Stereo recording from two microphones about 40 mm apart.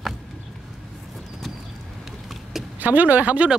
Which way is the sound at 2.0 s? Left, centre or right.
Centre.